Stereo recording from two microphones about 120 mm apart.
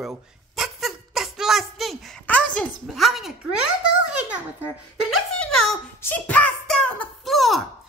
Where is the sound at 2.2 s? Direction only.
10° left (ahead or behind).